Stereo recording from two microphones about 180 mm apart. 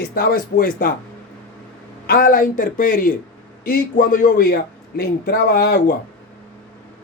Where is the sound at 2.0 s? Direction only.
55° left (ahead or behind).